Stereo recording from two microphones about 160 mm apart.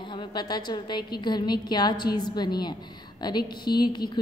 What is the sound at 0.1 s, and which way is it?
A woman's voice, 30° left (ahead or behind).